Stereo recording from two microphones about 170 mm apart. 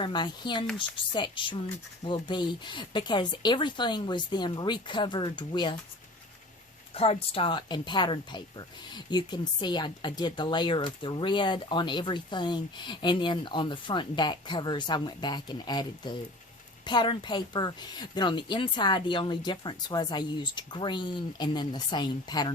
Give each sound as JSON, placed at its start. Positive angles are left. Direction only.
{"t": 0.0, "sound": "speech", "side_deg": 25}
{"t": 6.9, "sound": "speech", "side_deg": 35}